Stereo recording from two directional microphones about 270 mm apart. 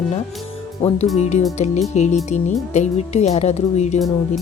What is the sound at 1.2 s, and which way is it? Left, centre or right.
Speech, left.